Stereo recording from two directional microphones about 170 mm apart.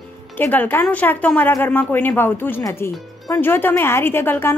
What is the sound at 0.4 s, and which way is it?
Speech, 10° left (ahead or behind).